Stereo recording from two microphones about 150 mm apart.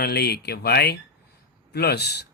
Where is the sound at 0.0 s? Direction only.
90° left.